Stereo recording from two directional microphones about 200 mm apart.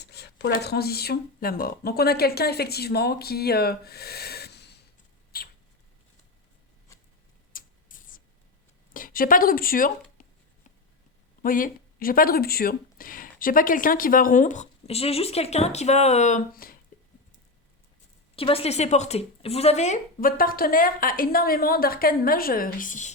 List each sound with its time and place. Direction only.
0.0 s speech: 55° left (ahead or behind)
5.3 s rodents: 50° left (ahead or behind)
7.5 s a sound: 45° left (ahead or behind)
8.9 s a woman's voice: 45° left (ahead or behind)
11.4 s speech: 45° left (ahead or behind)
18.3 s speech: 30° left (ahead or behind)